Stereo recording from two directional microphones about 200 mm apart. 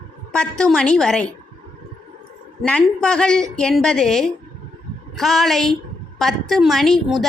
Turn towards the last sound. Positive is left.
turn(degrees=0)  # may be behind; listen again after turning